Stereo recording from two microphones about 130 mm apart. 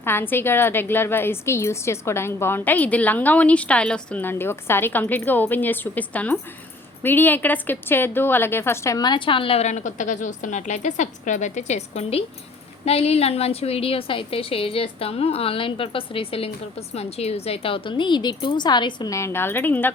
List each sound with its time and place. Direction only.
0.0 s a woman's voice: 15° left (ahead or behind); by 19.1 s 35° left (ahead or behind)
19.1 s a woman's voice: 20° left (ahead or behind)